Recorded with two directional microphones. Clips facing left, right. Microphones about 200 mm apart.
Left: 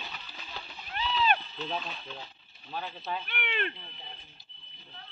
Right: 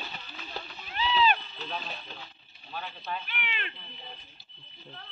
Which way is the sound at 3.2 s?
55° left (ahead or behind).